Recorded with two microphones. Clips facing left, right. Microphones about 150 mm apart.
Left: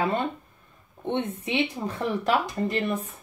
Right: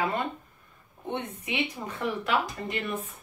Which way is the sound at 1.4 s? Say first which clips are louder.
Left 5 dB; 30° left (ahead or behind).